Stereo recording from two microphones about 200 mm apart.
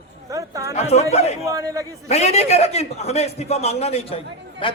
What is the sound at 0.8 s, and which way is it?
Speech, 30° left (ahead or behind).